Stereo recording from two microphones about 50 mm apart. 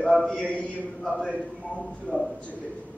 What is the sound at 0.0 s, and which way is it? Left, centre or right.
Speech, centre.